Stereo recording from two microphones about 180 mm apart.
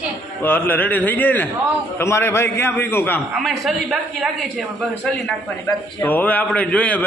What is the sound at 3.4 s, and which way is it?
A man's voice, centre (ahead or behind).